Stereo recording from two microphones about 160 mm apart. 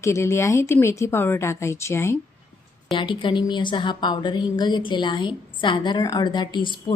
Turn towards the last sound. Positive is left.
turn(degrees=30)  # may be behind; listen again after turning